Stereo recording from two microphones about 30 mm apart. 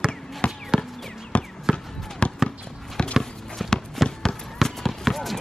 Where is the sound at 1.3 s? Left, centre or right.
Left.